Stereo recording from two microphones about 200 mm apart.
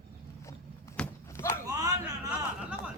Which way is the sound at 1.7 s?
20° right (ahead or behind).